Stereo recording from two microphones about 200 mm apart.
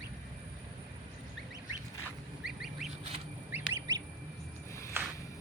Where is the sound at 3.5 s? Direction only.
15° right (ahead or behind).